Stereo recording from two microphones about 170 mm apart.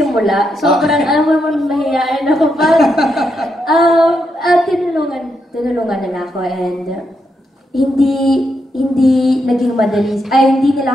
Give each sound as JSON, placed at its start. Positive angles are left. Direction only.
{"t": 0.0, "sound": "a woman's voice", "side_deg": 0}